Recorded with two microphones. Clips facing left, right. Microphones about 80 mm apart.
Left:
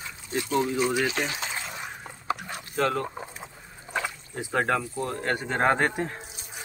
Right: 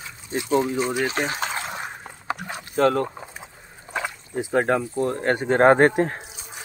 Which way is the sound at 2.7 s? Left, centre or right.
Right.